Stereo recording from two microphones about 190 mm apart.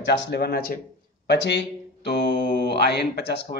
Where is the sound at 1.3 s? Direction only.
65° left (ahead or behind).